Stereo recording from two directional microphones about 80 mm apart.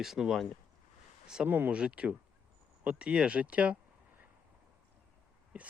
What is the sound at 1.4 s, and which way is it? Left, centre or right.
Speech, right.